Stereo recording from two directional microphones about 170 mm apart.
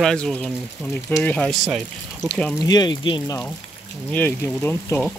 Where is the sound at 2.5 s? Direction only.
25° left (ahead or behind).